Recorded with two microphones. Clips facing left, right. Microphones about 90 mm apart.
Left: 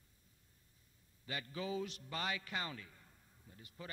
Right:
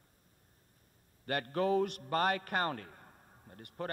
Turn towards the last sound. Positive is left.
turn(degrees=-60)  # may be behind; listen again after turning